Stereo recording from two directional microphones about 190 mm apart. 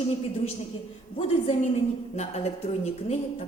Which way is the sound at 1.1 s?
30° left (ahead or behind).